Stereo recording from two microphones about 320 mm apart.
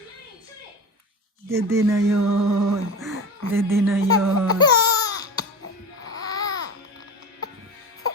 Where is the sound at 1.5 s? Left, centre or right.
Centre.